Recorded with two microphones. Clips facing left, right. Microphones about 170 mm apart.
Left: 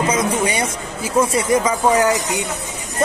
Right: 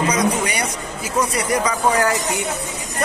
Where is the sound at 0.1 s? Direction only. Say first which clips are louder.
Left 1 dB; 25° left (ahead or behind).